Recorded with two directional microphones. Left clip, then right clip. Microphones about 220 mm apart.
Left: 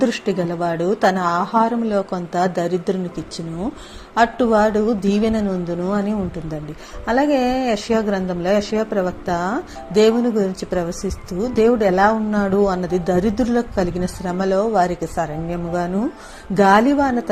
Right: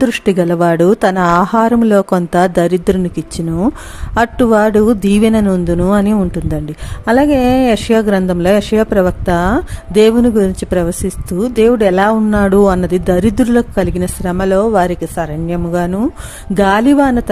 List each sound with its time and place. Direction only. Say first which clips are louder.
0.0 s a woman's voice: right 7 dB; 40° right (ahead or behind)
11.3 s speech: right 7 dB; 65° right (ahead or behind)
11.5 s a woman's voice: right 5 dB; 40° right (ahead or behind)